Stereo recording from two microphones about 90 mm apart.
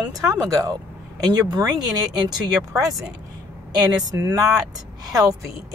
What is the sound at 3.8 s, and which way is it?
Speech, 50° right (ahead or behind).